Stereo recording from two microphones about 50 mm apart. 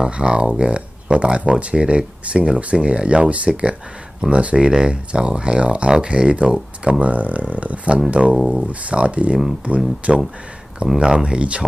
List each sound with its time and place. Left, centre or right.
0.0 s speech: centre
10.9 s speech: centre